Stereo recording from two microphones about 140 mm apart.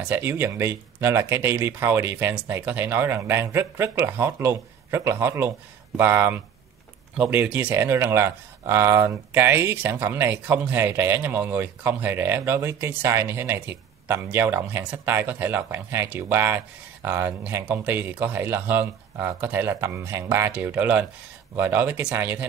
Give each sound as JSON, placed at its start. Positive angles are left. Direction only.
{"t": 0.0, "sound": "speech", "side_deg": -15}